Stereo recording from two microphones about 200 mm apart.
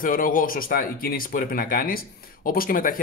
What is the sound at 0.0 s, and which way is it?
Speech, 45° left (ahead or behind).